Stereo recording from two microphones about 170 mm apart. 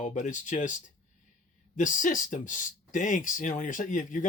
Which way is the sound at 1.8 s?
50° left (ahead or behind).